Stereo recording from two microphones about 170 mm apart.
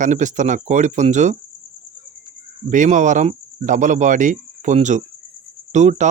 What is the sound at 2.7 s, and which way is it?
Speech, 45° right (ahead or behind).